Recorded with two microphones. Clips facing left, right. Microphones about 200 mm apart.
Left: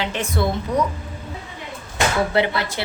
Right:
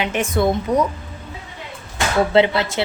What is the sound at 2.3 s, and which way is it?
Speech, 25° right (ahead or behind).